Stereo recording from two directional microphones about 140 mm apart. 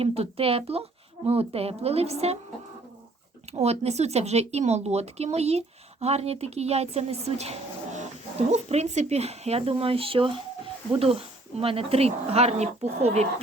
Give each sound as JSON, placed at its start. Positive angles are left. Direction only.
{"t": 0.0, "sound": "speech", "side_deg": -45}
{"t": 3.5, "sound": "speech", "side_deg": -50}